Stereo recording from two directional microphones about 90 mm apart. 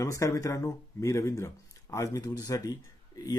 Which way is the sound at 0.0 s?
35° left (ahead or behind).